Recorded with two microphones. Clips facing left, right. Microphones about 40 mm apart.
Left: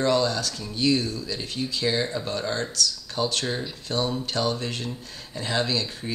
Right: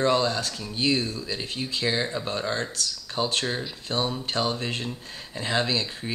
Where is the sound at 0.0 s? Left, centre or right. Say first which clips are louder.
Even; right.